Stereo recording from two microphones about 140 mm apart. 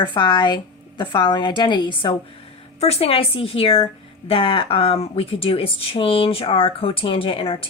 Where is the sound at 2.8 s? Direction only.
50° left (ahead or behind).